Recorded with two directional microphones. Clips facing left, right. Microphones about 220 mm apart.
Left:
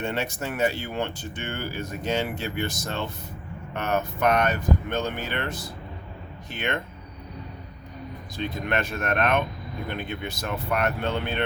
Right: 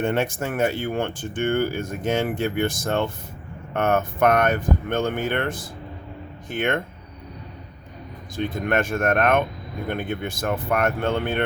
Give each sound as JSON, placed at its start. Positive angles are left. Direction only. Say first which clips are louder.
{"t": 0.0, "sound": "speech", "louder": "right 6 dB", "side_deg": -50}
{"t": 8.4, "sound": "speech", "louder": "right 5 dB", "side_deg": -50}